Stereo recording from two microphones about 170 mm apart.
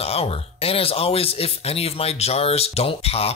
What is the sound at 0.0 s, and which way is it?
Speech, 35° left (ahead or behind).